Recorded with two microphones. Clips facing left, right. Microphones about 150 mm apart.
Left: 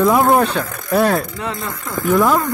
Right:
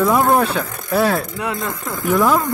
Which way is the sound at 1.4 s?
10° right (ahead or behind).